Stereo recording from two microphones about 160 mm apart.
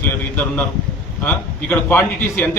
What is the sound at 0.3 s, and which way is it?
A man's voice, 10° left (ahead or behind).